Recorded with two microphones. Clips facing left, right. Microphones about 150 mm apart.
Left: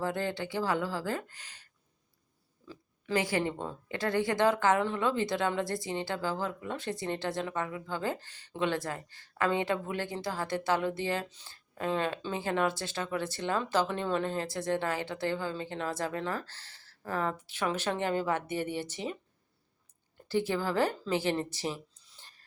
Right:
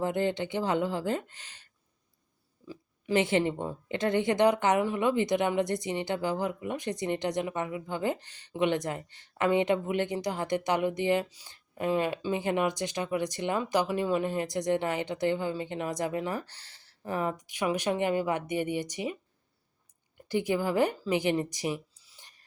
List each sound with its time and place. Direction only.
0.0 s speech: 20° right (ahead or behind)
2.6 s speech: 20° right (ahead or behind)
20.2 s a woman's voice: 15° right (ahead or behind)